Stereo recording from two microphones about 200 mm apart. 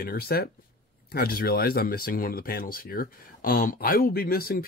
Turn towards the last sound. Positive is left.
turn(degrees=50)  # may be behind; listen again after turning